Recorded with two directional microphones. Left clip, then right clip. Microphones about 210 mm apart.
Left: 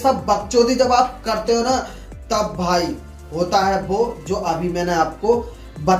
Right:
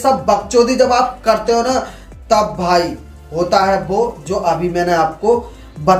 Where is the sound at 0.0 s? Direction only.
20° right (ahead or behind).